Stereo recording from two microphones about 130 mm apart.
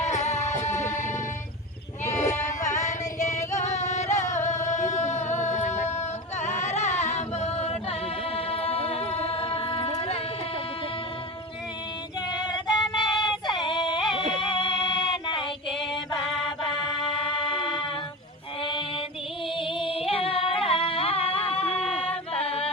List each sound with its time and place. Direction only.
0.0 s music: 65° left (ahead or behind)
2.0 s sheep: 65° left (ahead or behind)
2.6 s music: 65° left (ahead or behind); by 10.2 s 45° left (ahead or behind)
12.3 s female singing: 35° left (ahead or behind)
13.5 s yodeling: 35° left (ahead or behind)
14.5 s music: 40° left (ahead or behind)
16.8 s music: 40° left (ahead or behind)
18.6 s mantra: 40° left (ahead or behind)
19.5 s singing: 40° left (ahead or behind)